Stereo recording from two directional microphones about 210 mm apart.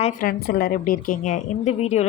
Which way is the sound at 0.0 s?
45° left (ahead or behind).